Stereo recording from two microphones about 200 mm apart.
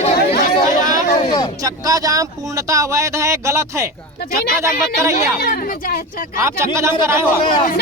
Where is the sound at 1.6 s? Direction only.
15° right (ahead or behind).